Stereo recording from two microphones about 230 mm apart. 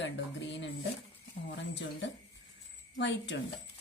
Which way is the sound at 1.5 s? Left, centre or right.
Left.